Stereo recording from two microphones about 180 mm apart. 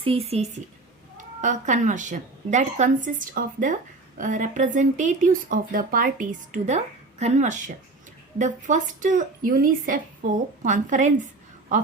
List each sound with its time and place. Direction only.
0.0 s a woman's voice: 30° right (ahead or behind)